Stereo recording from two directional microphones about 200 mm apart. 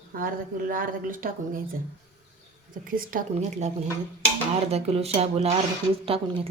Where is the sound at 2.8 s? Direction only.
45° right (ahead or behind).